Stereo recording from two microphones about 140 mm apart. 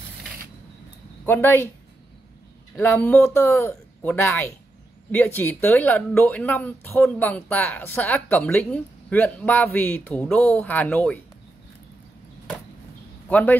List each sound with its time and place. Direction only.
1.2 s speech: 15° left (ahead or behind)
2.8 s speech: 10° left (ahead or behind)
13.3 s speech: 10° left (ahead or behind)